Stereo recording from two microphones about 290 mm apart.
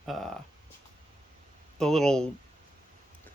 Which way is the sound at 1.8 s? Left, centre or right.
Centre.